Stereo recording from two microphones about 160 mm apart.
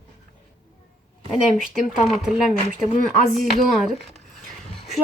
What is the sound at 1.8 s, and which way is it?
Speech, 50° left (ahead or behind).